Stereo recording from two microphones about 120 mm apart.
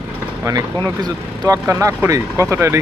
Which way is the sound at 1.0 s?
30° right (ahead or behind).